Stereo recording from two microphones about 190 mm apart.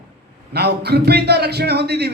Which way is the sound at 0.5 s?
60° right (ahead or behind).